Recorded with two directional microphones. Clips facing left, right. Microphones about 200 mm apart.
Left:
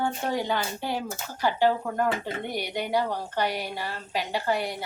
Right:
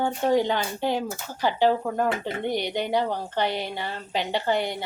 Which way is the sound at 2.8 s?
25° right (ahead or behind).